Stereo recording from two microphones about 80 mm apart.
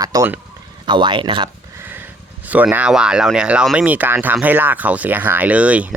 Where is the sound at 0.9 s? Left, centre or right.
Right.